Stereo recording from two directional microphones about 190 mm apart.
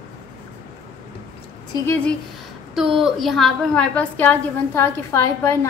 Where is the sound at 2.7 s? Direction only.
Centre (ahead or behind).